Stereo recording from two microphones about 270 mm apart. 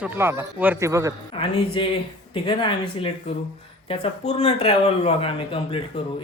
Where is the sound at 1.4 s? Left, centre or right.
Centre.